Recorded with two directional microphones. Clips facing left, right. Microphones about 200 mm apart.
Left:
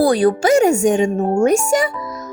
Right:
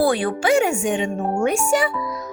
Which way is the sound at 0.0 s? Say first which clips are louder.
Left 5 dB; 40° left (ahead or behind).